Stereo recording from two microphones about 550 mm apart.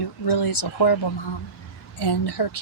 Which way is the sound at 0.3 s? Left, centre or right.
Left.